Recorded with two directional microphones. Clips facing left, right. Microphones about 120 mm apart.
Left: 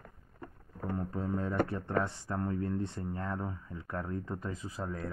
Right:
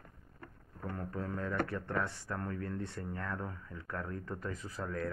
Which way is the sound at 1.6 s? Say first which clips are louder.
Left 4 dB; 20° left (ahead or behind).